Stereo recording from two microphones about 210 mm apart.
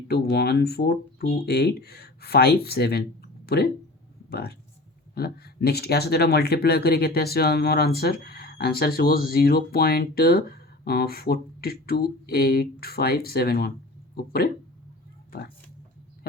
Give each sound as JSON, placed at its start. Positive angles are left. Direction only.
{"t": 0.1, "sound": "speech", "side_deg": 50}